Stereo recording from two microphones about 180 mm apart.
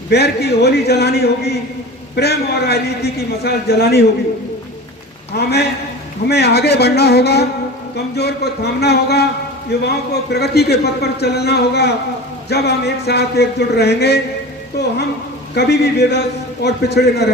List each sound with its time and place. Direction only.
0.1 s speech: 65° left (ahead or behind)
5.3 s a man's voice: 65° left (ahead or behind)
15.5 s a man's voice: 65° left (ahead or behind)